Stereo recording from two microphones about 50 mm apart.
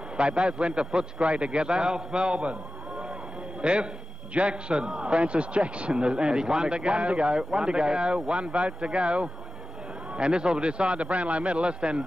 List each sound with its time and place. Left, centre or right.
0.2 s a man's voice: right
3.6 s a man's voice: right